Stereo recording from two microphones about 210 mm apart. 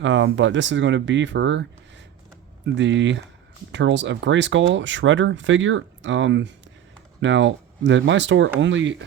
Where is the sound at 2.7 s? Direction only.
60° right (ahead or behind).